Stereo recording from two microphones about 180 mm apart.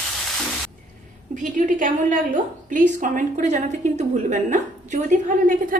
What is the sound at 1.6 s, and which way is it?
A woman's voice, 50° right (ahead or behind).